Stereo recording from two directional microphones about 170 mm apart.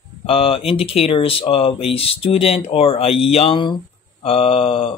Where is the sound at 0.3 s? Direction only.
35° left (ahead or behind).